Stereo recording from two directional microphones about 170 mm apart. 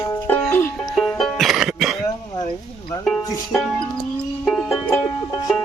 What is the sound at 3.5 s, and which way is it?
Speech, centre (ahead or behind).